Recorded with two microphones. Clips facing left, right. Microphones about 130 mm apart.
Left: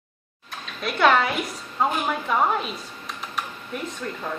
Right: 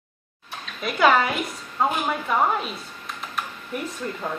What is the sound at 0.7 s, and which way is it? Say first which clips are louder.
Speech: even; centre (ahead or behind).